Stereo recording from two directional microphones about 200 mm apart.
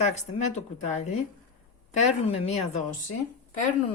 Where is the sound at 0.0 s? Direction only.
35° left (ahead or behind).